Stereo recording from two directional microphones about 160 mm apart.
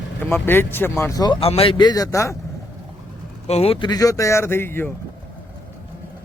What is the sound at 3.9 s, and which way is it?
Speech, 20° left (ahead or behind).